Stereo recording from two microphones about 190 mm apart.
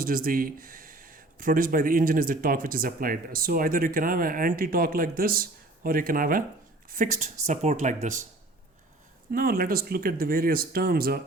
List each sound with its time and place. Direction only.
0.0 s speech: 50° right (ahead or behind)
9.3 s speech: 50° right (ahead or behind)